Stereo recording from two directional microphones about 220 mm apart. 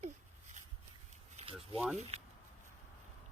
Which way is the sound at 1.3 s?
25° right (ahead or behind).